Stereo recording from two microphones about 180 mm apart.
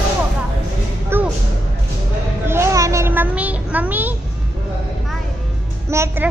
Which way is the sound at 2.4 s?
15° right (ahead or behind).